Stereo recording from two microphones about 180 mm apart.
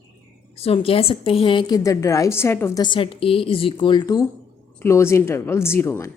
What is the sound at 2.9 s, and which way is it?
A woman's voice, 30° left (ahead or behind).